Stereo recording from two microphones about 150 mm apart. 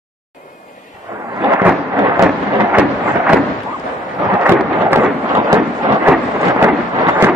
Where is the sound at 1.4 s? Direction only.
10° right (ahead or behind).